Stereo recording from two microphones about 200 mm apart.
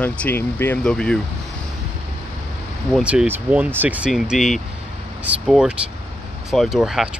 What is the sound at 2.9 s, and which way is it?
Speech, 5° right (ahead or behind).